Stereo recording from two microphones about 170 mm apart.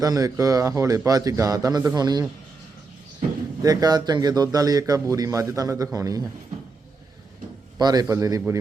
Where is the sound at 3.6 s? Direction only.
20° right (ahead or behind).